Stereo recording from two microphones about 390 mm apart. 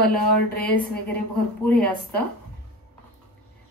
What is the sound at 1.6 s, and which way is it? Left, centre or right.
Speech, centre.